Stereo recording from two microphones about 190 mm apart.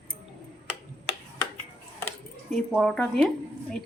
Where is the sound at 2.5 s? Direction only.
5° left (ahead or behind).